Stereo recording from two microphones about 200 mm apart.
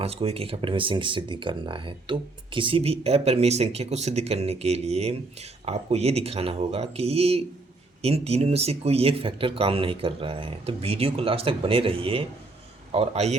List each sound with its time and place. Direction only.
0.0 s speech: 30° right (ahead or behind)